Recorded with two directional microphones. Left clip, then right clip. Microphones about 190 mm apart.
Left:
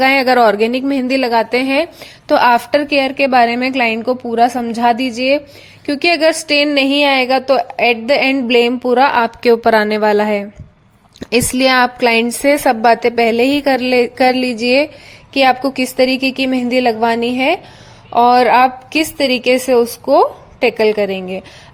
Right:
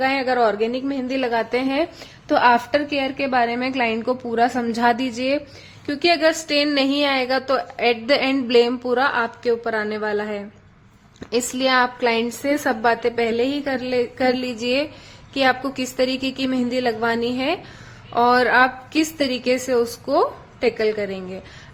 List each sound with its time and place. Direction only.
0.0 s a woman's voice: 35° left (ahead or behind); by 5.4 s 15° left (ahead or behind)
5.8 s a woman's voice: 30° left (ahead or behind)